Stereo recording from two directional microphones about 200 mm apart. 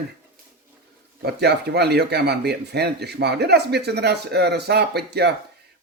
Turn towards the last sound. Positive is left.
turn(degrees=-55)  # may be behind; listen again after turning